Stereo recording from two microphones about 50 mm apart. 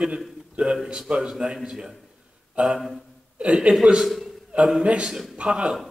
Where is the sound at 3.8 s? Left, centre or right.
Centre.